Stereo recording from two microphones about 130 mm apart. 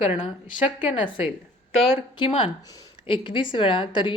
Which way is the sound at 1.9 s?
40° left (ahead or behind).